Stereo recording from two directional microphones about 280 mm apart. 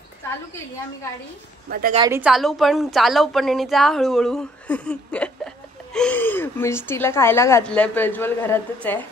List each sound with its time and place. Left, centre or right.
1.7 s speech: right
2.0 s a woman's voice: centre